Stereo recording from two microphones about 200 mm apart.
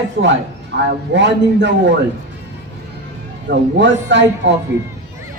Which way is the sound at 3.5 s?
60° right (ahead or behind).